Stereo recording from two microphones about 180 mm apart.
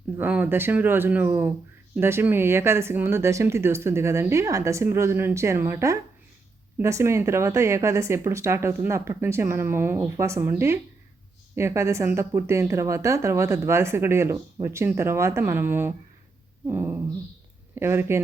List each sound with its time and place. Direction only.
0.2 s speech: 10° right (ahead or behind)